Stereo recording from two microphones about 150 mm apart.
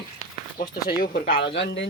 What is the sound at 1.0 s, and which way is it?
Speech, 70° left (ahead or behind).